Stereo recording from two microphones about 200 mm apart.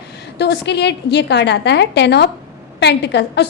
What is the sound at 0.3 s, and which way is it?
A woman's voice, 55° left (ahead or behind).